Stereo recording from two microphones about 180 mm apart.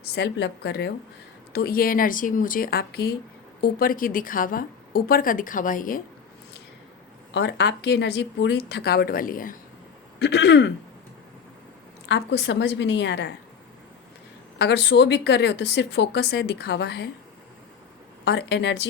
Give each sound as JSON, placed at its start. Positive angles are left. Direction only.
{"t": 0.0, "sound": "speech", "side_deg": 65}
{"t": 1.5, "sound": "a woman's voice", "side_deg": 55}
{"t": 7.3, "sound": "speech", "side_deg": 75}
{"t": 10.2, "sound": "speech", "side_deg": 70}
{"t": 12.0, "sound": "speech", "side_deg": 70}
{"t": 14.6, "sound": "speech", "side_deg": 70}
{"t": 18.3, "sound": "speech", "side_deg": 70}